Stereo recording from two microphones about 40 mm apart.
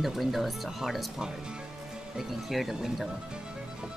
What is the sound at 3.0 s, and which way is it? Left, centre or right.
Music, right.